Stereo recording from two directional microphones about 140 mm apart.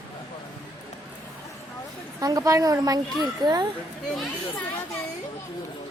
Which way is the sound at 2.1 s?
25° right (ahead or behind).